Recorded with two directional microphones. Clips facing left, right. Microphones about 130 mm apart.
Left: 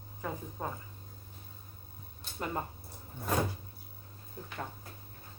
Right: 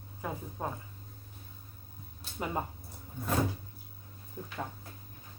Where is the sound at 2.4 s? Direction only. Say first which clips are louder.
Right 2 dB; 10° right (ahead or behind).